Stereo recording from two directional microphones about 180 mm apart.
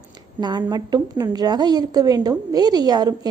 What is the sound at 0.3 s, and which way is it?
A woman's voice, 25° right (ahead or behind).